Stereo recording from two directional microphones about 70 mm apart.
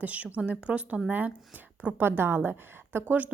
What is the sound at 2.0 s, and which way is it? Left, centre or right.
A woman's voice, right.